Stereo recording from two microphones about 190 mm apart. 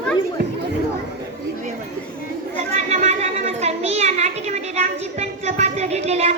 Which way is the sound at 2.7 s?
35° right (ahead or behind).